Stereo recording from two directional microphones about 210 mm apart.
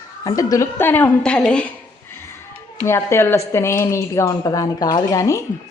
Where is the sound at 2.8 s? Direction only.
10° left (ahead or behind).